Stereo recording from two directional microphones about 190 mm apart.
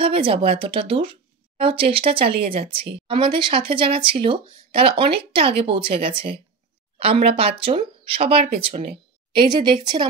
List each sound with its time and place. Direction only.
0.0 s speech: 30° right (ahead or behind)